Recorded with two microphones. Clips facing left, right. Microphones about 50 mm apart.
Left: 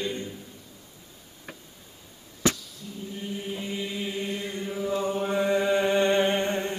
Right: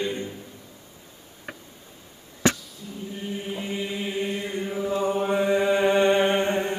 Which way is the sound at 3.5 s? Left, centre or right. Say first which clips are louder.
Right 3 dB; centre.